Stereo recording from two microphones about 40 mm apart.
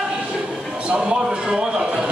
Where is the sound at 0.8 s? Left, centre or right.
Centre.